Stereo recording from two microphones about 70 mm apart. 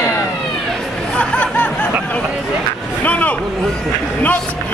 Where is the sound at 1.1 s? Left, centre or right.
Centre.